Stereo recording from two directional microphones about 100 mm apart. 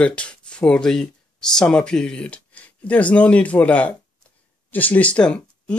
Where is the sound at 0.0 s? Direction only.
10° left (ahead or behind).